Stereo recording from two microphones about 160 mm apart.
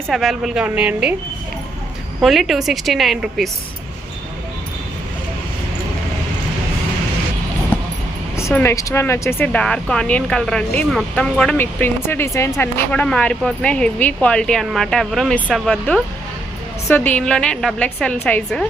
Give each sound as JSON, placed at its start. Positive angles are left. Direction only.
{"t": 0.1, "sound": "speech", "side_deg": 0}
{"t": 2.2, "sound": "speech", "side_deg": 0}
{"t": 8.5, "sound": "speech", "side_deg": 15}